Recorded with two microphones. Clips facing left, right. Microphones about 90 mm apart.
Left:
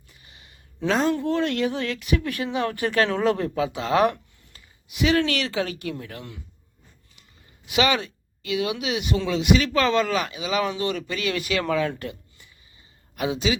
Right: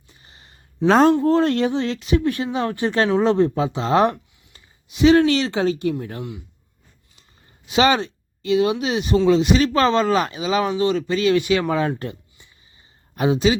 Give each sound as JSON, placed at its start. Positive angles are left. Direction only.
{"t": 0.1, "sound": "a sound", "side_deg": -30}
{"t": 0.9, "sound": "speech", "side_deg": -45}
{"t": 7.7, "sound": "speech", "side_deg": -30}